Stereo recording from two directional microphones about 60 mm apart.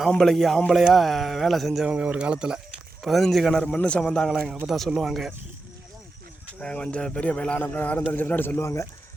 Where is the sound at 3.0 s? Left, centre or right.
Centre.